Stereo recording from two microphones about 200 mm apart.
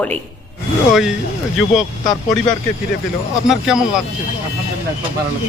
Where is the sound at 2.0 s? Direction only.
20° left (ahead or behind).